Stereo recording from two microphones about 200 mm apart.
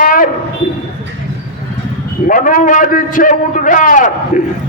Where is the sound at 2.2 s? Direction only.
40° left (ahead or behind).